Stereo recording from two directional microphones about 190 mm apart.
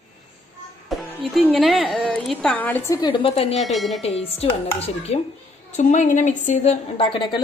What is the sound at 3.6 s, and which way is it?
Speech, centre (ahead or behind).